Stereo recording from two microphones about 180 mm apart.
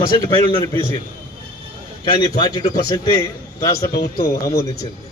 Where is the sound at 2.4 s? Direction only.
20° left (ahead or behind).